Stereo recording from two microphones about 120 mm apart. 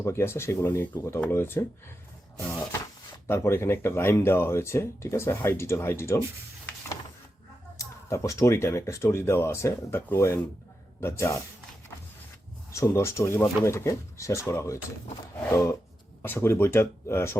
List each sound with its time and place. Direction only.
0.0 s speech: 20° left (ahead or behind)
3.2 s speech: 20° left (ahead or behind)
7.8 s speech: 25° left (ahead or behind)
12.7 s speech: 25° left (ahead or behind)